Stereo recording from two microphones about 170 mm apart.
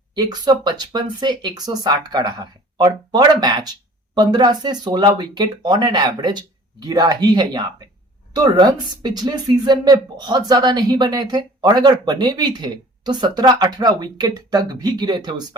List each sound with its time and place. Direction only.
0.1 s speech: 25° right (ahead or behind)